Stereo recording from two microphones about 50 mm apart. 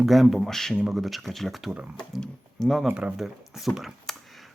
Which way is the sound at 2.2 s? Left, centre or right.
Centre.